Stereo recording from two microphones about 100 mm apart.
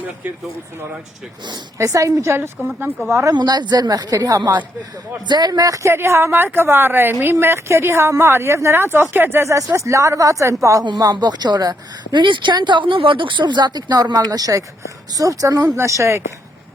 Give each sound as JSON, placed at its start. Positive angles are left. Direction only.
{"t": 1.8, "sound": "a woman's voice", "side_deg": -35}
{"t": 3.1, "sound": "speech", "side_deg": -30}
{"t": 3.3, "sound": "a woman's voice", "side_deg": -45}
{"t": 10.8, "sound": "speech", "side_deg": -45}